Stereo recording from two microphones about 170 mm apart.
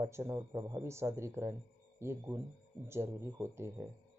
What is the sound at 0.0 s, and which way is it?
Speech, 15° right (ahead or behind).